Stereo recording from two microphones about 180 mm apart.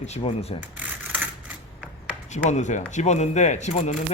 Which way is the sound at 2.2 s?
40° left (ahead or behind).